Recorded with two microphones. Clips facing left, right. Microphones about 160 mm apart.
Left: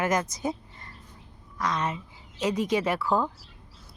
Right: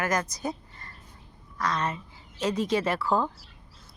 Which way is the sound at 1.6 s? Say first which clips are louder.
Even; 20° left (ahead or behind).